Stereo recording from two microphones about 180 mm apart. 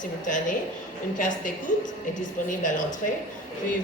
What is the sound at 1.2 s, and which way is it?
A woman's voice, 45° left (ahead or behind).